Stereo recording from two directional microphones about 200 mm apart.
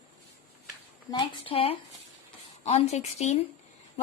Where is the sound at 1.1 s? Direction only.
25° left (ahead or behind).